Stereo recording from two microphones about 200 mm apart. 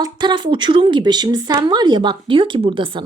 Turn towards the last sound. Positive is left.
turn(degrees=-25)  # may be behind; listen again after turning